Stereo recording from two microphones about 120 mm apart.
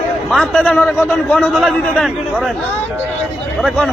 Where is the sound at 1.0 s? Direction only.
20° left (ahead or behind).